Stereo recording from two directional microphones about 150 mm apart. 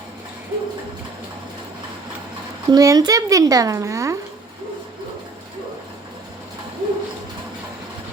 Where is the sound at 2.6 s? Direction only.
25° right (ahead or behind).